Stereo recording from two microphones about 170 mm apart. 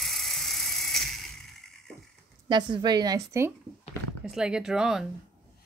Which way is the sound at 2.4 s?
25° right (ahead or behind).